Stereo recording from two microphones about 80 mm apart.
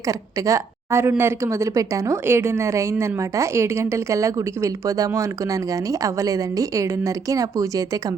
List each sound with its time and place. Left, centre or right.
0.1 s a woman's voice: right